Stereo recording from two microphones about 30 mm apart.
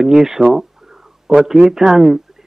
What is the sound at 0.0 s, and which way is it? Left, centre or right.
Speech, centre.